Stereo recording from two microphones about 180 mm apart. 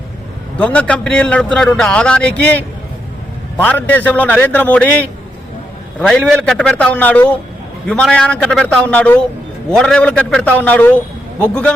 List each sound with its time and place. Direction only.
0.5 s a man's voice: 5° left (ahead or behind)